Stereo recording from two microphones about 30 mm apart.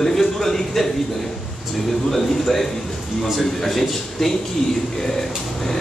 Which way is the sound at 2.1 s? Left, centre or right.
Centre.